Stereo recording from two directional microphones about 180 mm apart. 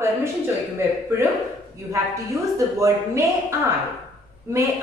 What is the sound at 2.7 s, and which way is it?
Speech, 15° right (ahead or behind).